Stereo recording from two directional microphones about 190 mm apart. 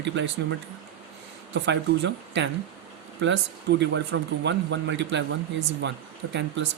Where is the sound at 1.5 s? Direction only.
65° right (ahead or behind).